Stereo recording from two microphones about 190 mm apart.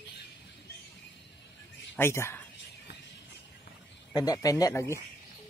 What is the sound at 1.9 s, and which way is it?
Speech, 15° left (ahead or behind).